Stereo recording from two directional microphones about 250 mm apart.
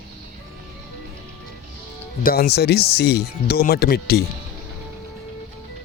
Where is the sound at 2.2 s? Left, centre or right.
Left.